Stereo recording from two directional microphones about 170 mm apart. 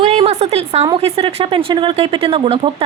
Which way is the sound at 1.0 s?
35° right (ahead or behind).